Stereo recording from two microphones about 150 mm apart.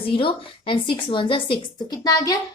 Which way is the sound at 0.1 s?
35° left (ahead or behind).